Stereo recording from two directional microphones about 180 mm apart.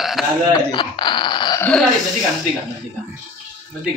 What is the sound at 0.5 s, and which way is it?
Speech, 25° left (ahead or behind).